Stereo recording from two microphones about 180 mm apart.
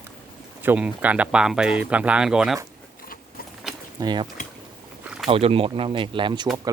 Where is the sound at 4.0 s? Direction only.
25° right (ahead or behind).